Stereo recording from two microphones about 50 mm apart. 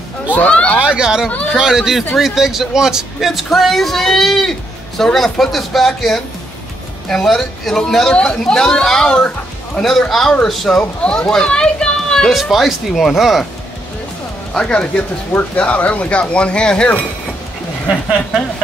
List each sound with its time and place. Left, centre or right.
0.4 s speech: left
0.7 s speech: centre
8.1 s a child's voice: centre
12.3 s speech: centre
14.5 s speech: left